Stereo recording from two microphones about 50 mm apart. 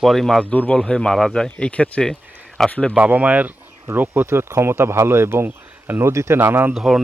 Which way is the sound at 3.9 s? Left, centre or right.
Right.